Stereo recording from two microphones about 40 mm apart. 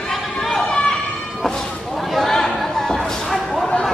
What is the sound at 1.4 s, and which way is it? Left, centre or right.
Whip, centre.